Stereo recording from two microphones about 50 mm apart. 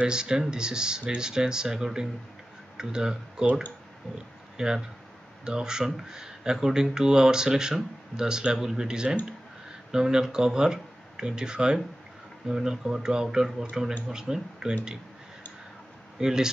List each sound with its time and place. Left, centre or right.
0.0 s speech: centre
4.6 s speech: centre
16.2 s speech: centre